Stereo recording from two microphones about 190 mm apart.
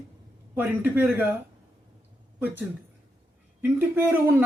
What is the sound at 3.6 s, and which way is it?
Speech, 10° right (ahead or behind).